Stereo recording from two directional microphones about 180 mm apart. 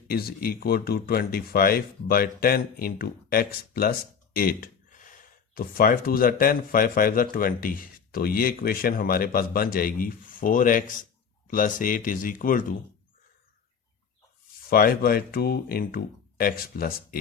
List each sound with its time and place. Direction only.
0.1 s speech: 55° left (ahead or behind)
4.4 s gasp: 55° left (ahead or behind)
5.5 s speech: 55° left (ahead or behind)
14.7 s speech: 55° left (ahead or behind)